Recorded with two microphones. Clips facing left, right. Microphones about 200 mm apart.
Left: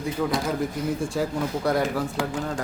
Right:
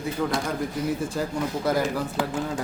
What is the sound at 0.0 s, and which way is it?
Speech, centre (ahead or behind).